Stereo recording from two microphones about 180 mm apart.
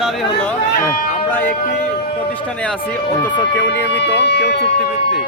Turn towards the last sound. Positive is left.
turn(degrees=75)  # may be behind; listen again after turning